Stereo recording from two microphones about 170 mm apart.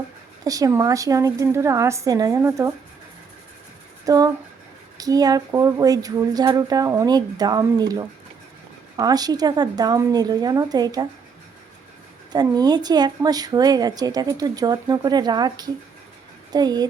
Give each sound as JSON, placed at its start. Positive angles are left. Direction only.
{"t": 0.4, "sound": "a woman's voice", "side_deg": -20}
{"t": 4.0, "sound": "speech", "side_deg": -20}
{"t": 12.3, "sound": "speech", "side_deg": -25}